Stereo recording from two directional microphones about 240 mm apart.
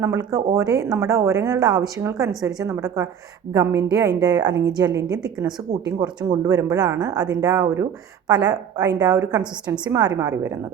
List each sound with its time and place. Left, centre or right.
0.0 s speech: centre